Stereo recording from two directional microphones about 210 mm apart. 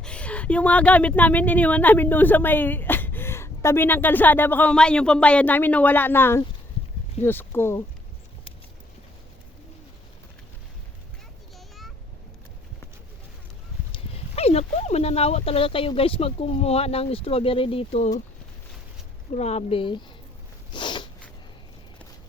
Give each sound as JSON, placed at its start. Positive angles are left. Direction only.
{"t": 0.0, "sound": "speech", "side_deg": 5}
{"t": 13.9, "sound": "speech", "side_deg": 30}
{"t": 19.3, "sound": "speech", "side_deg": 30}
{"t": 20.7, "sound": "sneeze", "side_deg": 25}